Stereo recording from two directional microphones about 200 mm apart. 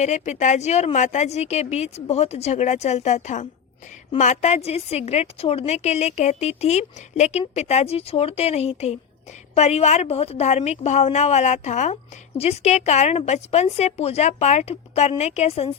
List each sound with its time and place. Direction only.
0.0 s a woman's voice: 35° left (ahead or behind)